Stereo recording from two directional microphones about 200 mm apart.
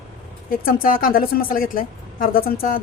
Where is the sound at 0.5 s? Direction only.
45° left (ahead or behind).